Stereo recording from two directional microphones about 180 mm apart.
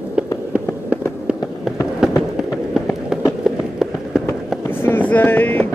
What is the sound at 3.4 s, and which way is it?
Run, 5° right (ahead or behind).